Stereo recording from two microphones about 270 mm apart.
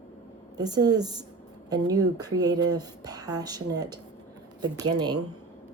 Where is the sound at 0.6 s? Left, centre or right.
Centre.